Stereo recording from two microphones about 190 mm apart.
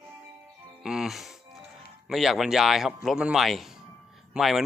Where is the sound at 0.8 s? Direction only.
Centre (ahead or behind).